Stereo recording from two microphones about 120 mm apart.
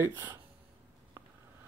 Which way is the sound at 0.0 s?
20° right (ahead or behind).